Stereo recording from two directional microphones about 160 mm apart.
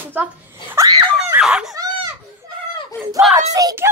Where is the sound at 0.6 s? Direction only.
15° right (ahead or behind).